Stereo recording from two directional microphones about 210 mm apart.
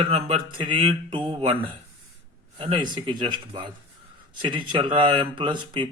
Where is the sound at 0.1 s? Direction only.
25° right (ahead or behind).